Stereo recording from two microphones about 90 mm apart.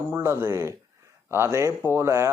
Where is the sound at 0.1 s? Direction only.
25° right (ahead or behind).